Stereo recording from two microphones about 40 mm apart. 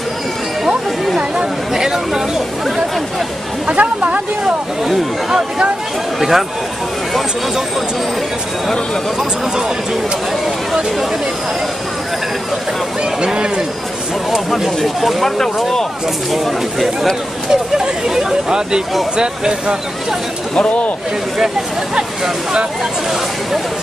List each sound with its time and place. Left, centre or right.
0.7 s speech: centre
3.6 s speech: right
4.8 s speech: centre
13.2 s speech: right
14.3 s speech: centre
17.5 s speech: centre
20.5 s speech: left
21.9 s speech: centre